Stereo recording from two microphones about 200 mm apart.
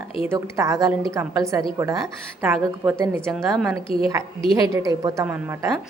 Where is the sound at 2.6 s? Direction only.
15° right (ahead or behind).